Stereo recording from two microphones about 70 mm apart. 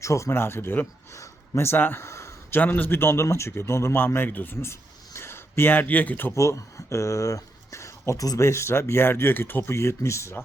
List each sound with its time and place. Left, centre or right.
0.0 s a man's voice: left
1.1 s speech: left
2.0 s a sound: left
2.5 s a man's voice: left
4.6 s speech: left
6.3 s speech: left
8.4 s a man's voice: left